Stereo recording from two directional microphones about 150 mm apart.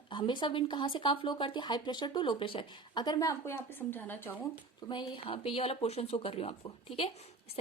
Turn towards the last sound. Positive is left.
turn(degrees=40)  # may be behind; listen again after turning